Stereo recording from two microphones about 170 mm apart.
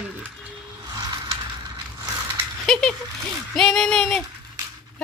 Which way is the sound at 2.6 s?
5° left (ahead or behind).